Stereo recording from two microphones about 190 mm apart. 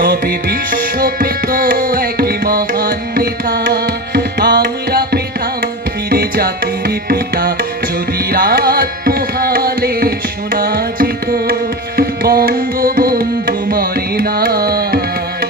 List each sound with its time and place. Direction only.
0.0 s music: 50° right (ahead or behind)